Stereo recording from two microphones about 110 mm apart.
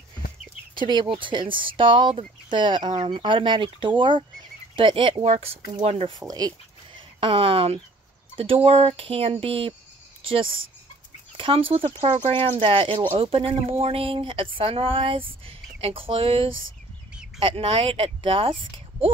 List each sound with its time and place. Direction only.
0.7 s speech: 45° right (ahead or behind)
3.0 s speech: 55° right (ahead or behind)
5.2 s speech: 75° right (ahead or behind)
6.1 s speech: 35° right (ahead or behind)
7.2 s speech: 50° right (ahead or behind)